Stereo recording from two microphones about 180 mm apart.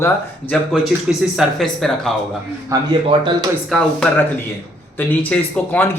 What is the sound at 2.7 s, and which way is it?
Speech, 20° right (ahead or behind).